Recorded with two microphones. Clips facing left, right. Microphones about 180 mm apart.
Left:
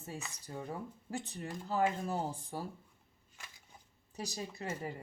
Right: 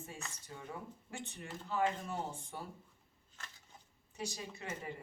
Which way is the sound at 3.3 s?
10° left (ahead or behind).